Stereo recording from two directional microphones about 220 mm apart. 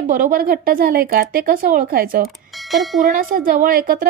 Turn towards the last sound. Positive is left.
turn(degrees=-40)  # may be behind; listen again after turning